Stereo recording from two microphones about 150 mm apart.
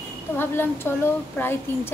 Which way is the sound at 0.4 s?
15° left (ahead or behind).